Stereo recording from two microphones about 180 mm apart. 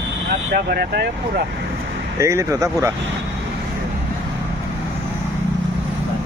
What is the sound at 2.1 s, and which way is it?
Speech, 15° right (ahead or behind).